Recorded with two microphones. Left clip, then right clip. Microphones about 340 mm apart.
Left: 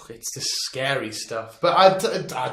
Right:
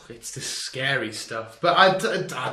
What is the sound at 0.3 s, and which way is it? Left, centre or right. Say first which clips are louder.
Speech: left 3 dB; centre.